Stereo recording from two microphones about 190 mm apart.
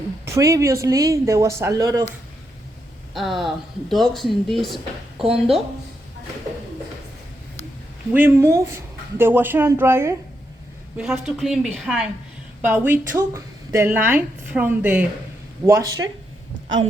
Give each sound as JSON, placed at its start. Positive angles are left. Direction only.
{"t": 0.3, "sound": "speech", "side_deg": -15}
{"t": 3.2, "sound": "speech", "side_deg": 0}
{"t": 5.2, "sound": "speech", "side_deg": -30}
{"t": 8.1, "sound": "speech", "side_deg": -10}
{"t": 10.9, "sound": "speech", "side_deg": 0}